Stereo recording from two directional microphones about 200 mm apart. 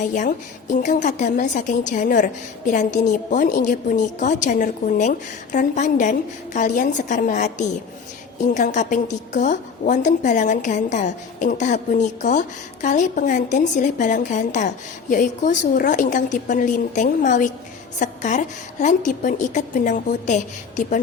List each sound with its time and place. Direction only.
0.0 s a woman's voice: 40° left (ahead or behind)